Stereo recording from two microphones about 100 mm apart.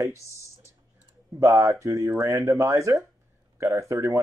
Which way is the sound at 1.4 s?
30° right (ahead or behind).